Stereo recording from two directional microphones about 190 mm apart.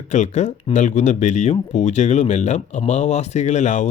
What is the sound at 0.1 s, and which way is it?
Speech, 40° left (ahead or behind).